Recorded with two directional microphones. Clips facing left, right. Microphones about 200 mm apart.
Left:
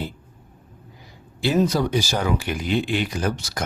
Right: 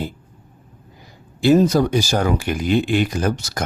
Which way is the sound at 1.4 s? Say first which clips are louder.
Right 6 dB; 45° right (ahead or behind).